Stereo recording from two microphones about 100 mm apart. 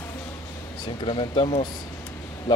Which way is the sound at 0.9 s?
55° left (ahead or behind).